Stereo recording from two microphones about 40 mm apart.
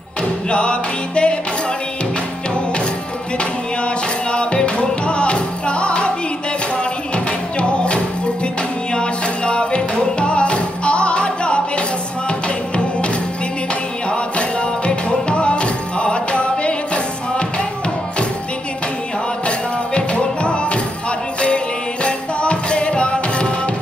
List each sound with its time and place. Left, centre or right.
0.5 s music: left
3.3 s music: left
7.5 s music: left
14.1 s music: left
19.4 s music: left
22.0 s music: left